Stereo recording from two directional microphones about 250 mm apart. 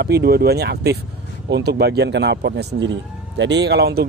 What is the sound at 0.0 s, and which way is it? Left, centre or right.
Speech, right.